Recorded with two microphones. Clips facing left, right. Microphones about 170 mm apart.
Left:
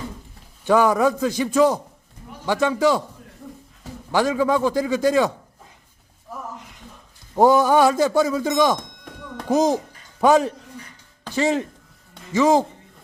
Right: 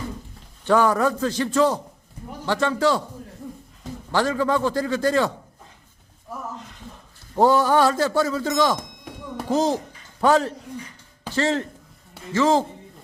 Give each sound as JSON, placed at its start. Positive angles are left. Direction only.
{"t": 0.6, "sound": "a man's voice", "side_deg": 10}
{"t": 4.1, "sound": "a man's voice", "side_deg": 10}
{"t": 7.3, "sound": "a man's voice", "side_deg": 15}